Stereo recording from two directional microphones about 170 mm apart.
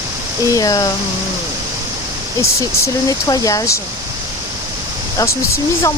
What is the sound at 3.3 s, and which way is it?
Speech, 20° left (ahead or behind).